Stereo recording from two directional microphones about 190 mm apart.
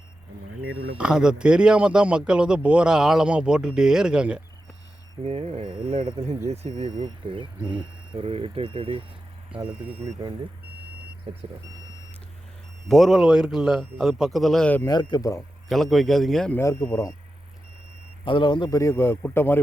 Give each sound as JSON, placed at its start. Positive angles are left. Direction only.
{"t": 0.6, "sound": "speech", "side_deg": -90}
{"t": 0.9, "sound": "speech", "side_deg": -5}
{"t": 5.2, "sound": "speech", "side_deg": -30}
{"t": 9.5, "sound": "speech", "side_deg": -5}
{"t": 11.3, "sound": "speech", "side_deg": -30}
{"t": 12.9, "sound": "a man's voice", "side_deg": 0}
{"t": 15.7, "sound": "speech", "side_deg": 0}
{"t": 16.6, "sound": "a man's voice", "side_deg": 15}
{"t": 18.3, "sound": "a man's voice", "side_deg": 25}